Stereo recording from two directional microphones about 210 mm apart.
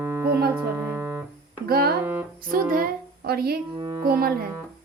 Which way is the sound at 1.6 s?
45° right (ahead or behind).